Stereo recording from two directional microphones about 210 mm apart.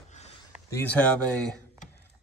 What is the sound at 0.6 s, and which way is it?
Speech, 10° left (ahead or behind).